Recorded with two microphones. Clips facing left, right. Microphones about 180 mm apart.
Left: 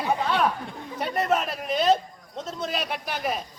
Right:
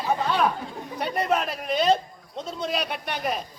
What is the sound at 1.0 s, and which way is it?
A man's voice, centre (ahead or behind).